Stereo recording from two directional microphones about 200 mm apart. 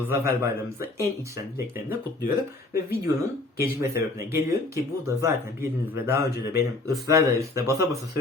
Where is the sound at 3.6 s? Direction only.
15° right (ahead or behind).